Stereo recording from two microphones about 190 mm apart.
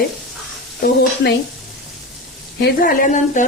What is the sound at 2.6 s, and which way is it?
Speech, 55° left (ahead or behind).